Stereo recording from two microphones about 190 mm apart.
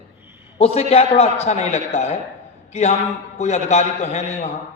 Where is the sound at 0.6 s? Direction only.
30° left (ahead or behind).